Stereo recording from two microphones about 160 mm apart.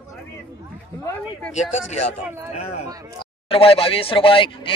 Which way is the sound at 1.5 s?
45° left (ahead or behind).